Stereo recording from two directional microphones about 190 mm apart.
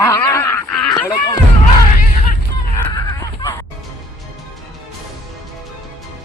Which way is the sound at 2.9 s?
20° left (ahead or behind).